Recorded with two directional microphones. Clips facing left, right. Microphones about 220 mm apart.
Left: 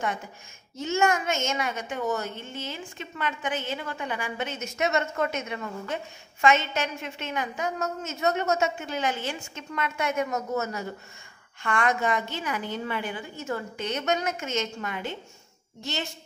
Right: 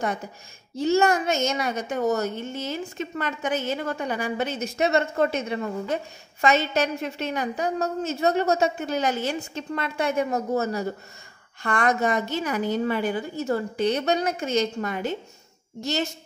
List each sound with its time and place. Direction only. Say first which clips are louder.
0.7 s a woman's voice: right 5 dB; 35° right (ahead or behind)